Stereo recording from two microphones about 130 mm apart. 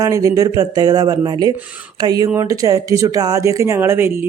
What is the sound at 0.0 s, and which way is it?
Speech, 25° right (ahead or behind).